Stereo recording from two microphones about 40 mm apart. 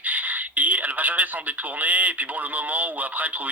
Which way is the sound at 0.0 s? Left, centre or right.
Right.